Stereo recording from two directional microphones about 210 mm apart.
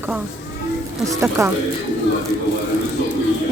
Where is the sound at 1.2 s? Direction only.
10° right (ahead or behind).